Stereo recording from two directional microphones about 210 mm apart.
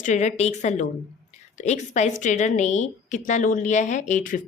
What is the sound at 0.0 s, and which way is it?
A woman's voice, 35° left (ahead or behind).